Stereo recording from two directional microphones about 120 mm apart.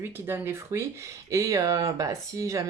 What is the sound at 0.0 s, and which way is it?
Speech, 20° right (ahead or behind).